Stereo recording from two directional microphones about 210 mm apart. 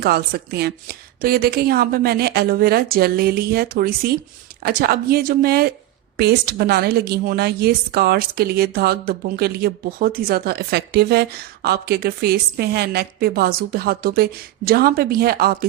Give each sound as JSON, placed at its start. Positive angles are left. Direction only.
{"t": 0.0, "sound": "speech", "side_deg": -50}